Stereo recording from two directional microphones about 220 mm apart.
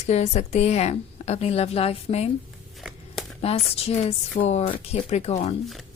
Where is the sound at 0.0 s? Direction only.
30° left (ahead or behind).